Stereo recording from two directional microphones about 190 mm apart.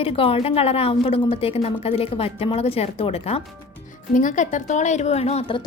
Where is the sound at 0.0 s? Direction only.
30° left (ahead or behind).